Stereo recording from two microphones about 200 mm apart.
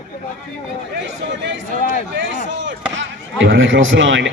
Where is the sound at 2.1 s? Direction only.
65° right (ahead or behind).